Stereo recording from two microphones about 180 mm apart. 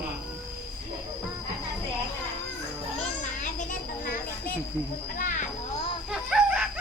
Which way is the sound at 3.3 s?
45° left (ahead or behind).